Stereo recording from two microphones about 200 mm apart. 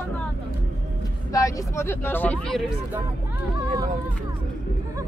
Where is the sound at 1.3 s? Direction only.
15° left (ahead or behind).